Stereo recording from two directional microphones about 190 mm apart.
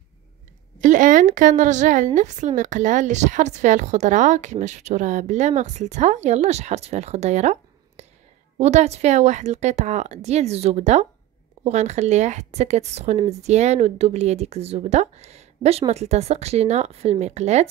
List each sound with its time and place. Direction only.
0.7 s speech: 40° right (ahead or behind)
8.5 s speech: 35° right (ahead or behind)